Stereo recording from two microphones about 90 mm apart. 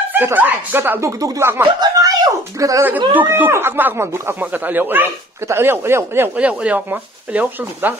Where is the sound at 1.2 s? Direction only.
40° right (ahead or behind).